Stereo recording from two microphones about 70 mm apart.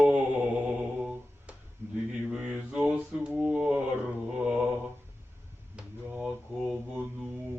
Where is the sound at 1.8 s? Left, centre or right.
Right.